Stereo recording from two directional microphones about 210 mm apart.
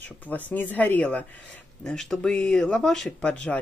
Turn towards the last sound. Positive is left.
turn(degrees=5)  # may be behind; listen again after turning